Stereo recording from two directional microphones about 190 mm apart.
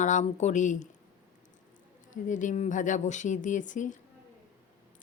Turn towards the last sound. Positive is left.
turn(degrees=40)  # may be behind; listen again after turning